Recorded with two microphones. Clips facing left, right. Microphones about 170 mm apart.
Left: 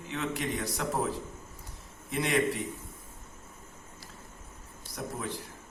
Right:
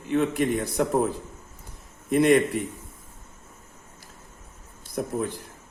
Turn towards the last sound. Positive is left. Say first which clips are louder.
# right 8 dB
turn(degrees=-55)  # may be behind; listen again after turning